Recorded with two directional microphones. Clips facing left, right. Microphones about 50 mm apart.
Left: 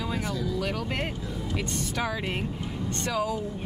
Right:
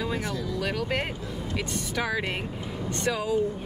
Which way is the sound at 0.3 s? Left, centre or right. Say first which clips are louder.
Even; centre.